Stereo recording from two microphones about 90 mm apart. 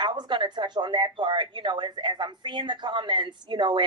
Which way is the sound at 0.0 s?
60° right (ahead or behind).